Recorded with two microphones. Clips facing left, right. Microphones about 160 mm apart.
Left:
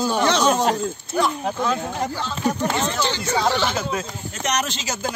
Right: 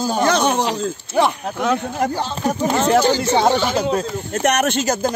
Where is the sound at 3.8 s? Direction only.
35° right (ahead or behind).